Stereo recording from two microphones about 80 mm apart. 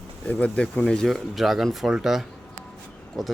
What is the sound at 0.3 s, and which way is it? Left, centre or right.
Speech, centre.